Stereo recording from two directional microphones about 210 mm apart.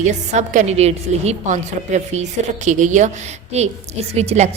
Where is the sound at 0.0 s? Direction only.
35° right (ahead or behind).